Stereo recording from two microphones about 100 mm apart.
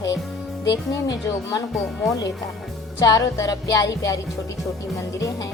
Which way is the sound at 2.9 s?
35° left (ahead or behind).